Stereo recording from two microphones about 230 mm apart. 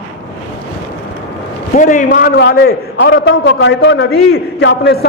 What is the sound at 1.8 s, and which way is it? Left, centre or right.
A man's voice, left.